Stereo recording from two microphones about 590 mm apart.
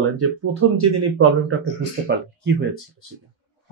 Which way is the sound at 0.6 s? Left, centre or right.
Right.